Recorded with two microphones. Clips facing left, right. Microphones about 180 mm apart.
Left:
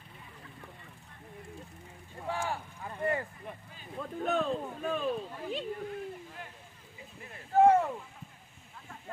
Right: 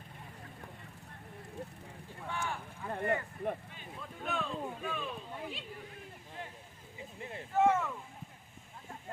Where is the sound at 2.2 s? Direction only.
35° left (ahead or behind).